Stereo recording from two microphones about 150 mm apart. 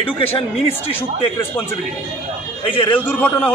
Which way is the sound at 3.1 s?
10° left (ahead or behind).